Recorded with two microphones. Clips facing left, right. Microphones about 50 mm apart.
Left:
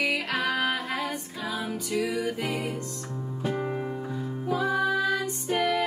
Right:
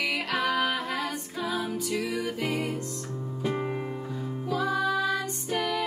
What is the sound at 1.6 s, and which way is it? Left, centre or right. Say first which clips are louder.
Music: left 1 dB; left.